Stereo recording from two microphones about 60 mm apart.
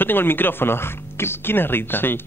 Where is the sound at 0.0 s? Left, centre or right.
Left.